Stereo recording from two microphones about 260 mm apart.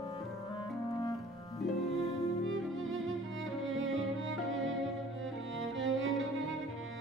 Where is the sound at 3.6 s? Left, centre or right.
Right.